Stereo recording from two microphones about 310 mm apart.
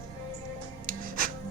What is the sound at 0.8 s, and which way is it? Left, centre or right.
Music, right.